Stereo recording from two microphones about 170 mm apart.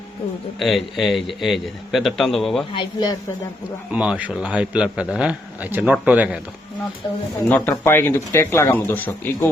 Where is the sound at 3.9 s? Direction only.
5° right (ahead or behind).